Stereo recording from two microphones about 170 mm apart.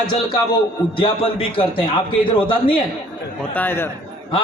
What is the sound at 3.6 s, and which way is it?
Speech, 15° left (ahead or behind).